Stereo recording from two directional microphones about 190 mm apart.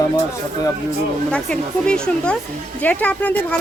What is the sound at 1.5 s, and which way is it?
Speech, 5° left (ahead or behind).